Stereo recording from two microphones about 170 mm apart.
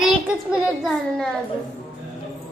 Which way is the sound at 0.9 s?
5° left (ahead or behind).